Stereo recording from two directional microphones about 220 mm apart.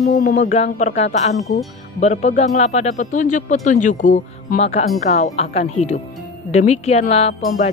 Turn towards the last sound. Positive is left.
turn(degrees=25)  # may be behind; listen again after turning